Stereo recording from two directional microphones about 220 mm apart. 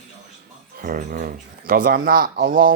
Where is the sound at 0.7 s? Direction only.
40° right (ahead or behind).